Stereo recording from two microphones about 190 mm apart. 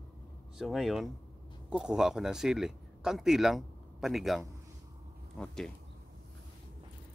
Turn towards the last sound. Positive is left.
turn(degrees=5)  # may be behind; listen again after turning